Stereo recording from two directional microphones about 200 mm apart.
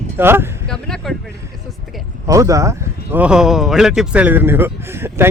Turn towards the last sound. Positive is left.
turn(degrees=-10)  # may be behind; listen again after turning